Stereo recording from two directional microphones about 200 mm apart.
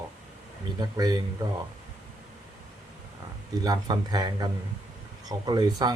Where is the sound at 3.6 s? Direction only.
20° right (ahead or behind).